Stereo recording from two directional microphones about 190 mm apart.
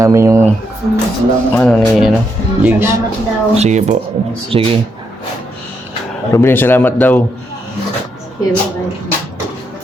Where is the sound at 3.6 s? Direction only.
35° right (ahead or behind).